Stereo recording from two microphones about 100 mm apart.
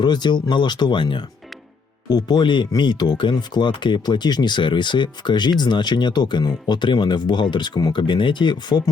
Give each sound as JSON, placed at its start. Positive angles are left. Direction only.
{"t": 0.0, "sound": "speech", "side_deg": 50}
{"t": 2.0, "sound": "speech", "side_deg": 40}